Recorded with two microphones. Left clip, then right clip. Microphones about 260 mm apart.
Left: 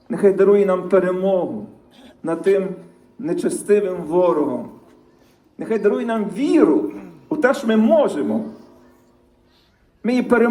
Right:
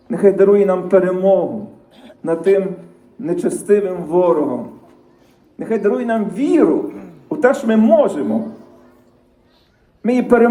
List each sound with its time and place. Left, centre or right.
0.1 s a man's voice: centre
2.5 s a man's voice: centre
6.8 s speech: left
7.3 s a man's voice: centre
10.0 s a man's voice: centre